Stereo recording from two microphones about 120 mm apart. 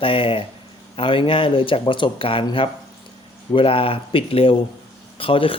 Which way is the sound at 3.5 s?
50° left (ahead or behind).